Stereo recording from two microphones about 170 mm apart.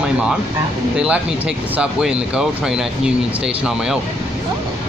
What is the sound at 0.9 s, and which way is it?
Speech, 5° right (ahead or behind).